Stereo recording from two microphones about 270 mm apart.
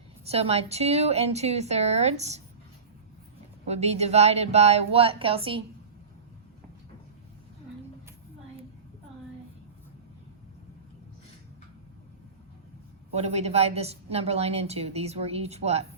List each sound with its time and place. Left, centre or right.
0.3 s a woman's voice: right
3.7 s a woman's voice: right
13.1 s a woman's voice: right